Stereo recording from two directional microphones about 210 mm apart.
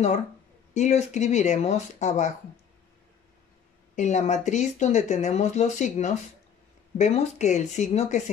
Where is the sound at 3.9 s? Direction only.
35° left (ahead or behind).